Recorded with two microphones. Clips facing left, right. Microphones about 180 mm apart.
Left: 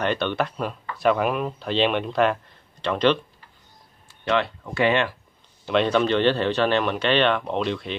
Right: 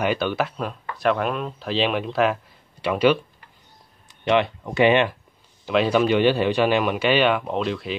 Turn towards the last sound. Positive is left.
turn(degrees=0)  # may be behind; listen again after turning